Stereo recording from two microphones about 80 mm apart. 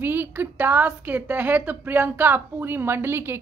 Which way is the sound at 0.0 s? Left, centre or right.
Right.